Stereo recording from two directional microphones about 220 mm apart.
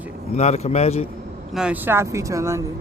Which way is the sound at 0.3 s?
30° left (ahead or behind).